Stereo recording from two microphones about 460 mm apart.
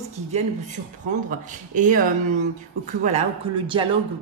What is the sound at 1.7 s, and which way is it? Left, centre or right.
Speech, centre.